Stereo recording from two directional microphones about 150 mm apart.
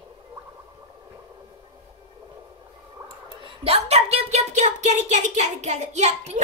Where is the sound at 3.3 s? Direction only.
35° right (ahead or behind).